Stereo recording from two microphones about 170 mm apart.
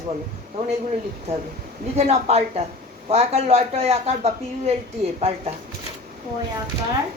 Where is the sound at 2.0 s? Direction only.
40° right (ahead or behind).